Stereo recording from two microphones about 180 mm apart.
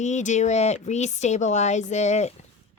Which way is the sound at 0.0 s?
40° left (ahead or behind).